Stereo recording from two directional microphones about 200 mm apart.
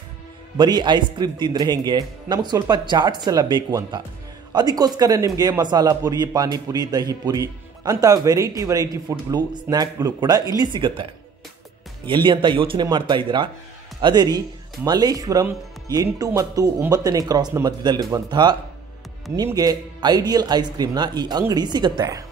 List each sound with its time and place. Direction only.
0.6 s a man's voice: 20° right (ahead or behind)
12.1 s a man's voice: 25° right (ahead or behind)